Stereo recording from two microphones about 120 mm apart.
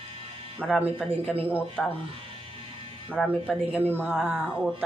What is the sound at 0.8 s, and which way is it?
Speech, 15° right (ahead or behind).